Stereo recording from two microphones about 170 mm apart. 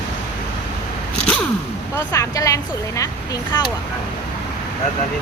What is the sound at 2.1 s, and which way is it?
Speech, 20° left (ahead or behind).